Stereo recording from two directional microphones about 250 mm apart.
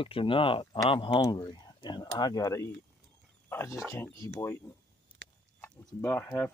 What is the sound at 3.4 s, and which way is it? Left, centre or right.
Wild animals, centre.